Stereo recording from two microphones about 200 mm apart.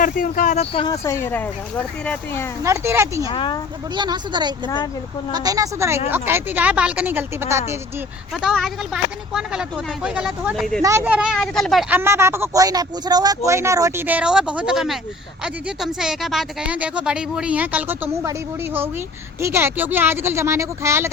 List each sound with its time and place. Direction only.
0.0 s speech: 40° left (ahead or behind); by 0.9 s 25° left (ahead or behind)
1.0 s speech: 15° left (ahead or behind)
2.6 s speech: 15° right (ahead or behind)
3.2 s speech: 25° left (ahead or behind)
3.9 s speech: 20° right (ahead or behind)
8.3 s speech: centre (ahead or behind)
10.8 s speech: 10° right (ahead or behind)